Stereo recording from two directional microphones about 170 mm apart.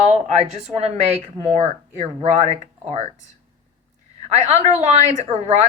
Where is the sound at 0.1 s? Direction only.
40° right (ahead or behind).